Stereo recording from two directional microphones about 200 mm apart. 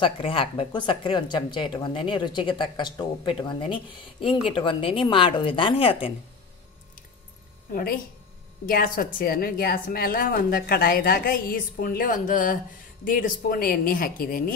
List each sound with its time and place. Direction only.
0.0 s speech: 25° left (ahead or behind)
7.7 s a woman's voice: 45° left (ahead or behind)